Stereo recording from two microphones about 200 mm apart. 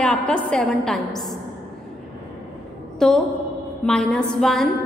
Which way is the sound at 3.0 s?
Centre (ahead or behind).